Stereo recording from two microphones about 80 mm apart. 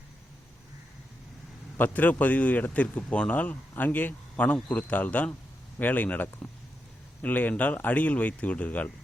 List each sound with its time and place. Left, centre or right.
1.8 s speech: centre
6.2 s speech: left